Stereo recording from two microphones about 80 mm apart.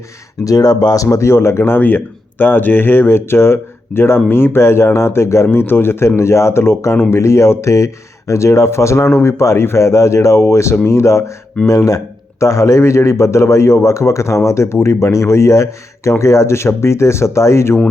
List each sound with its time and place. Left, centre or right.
0.4 s speech: left
1.0 s a man's voice: left